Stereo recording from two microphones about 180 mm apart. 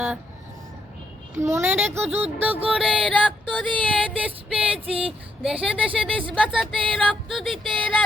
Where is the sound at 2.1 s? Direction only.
35° right (ahead or behind).